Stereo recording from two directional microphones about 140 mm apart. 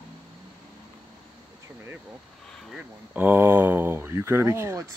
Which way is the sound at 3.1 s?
15° right (ahead or behind).